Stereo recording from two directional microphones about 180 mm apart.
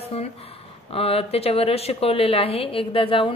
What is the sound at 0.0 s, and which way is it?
A woman's voice, 35° left (ahead or behind).